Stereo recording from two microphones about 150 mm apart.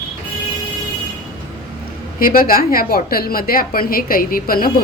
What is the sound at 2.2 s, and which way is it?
A woman's voice, 70° left (ahead or behind).